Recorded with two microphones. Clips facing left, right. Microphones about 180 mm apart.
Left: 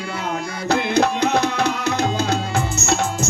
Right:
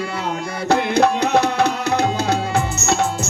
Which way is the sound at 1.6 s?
35° right (ahead or behind).